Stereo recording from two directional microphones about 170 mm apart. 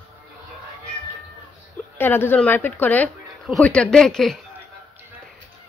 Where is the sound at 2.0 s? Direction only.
10° left (ahead or behind).